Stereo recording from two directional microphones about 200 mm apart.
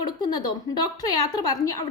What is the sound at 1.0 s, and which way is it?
Speech, 20° left (ahead or behind).